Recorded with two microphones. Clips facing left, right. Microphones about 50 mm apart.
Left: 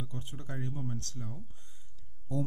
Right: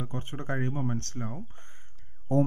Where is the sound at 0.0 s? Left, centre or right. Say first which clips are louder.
Right 7 dB; right.